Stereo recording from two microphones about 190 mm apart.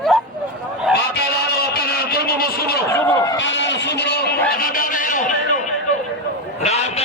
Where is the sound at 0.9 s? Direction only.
5° right (ahead or behind).